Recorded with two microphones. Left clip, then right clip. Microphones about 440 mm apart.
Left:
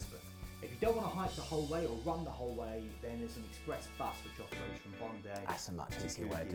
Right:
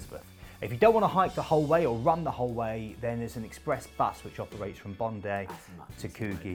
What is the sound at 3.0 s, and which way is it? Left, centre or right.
Speech, right.